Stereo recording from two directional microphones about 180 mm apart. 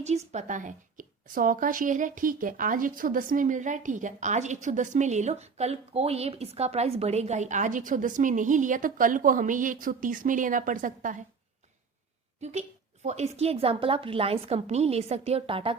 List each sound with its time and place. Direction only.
0.0 s a woman's voice: 40° right (ahead or behind)
12.4 s a woman's voice: 40° right (ahead or behind)